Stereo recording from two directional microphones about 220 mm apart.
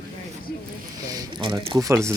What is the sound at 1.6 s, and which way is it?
Speech, 20° right (ahead or behind).